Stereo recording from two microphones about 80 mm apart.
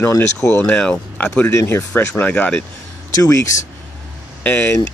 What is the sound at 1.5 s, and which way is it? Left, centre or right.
Speech, left.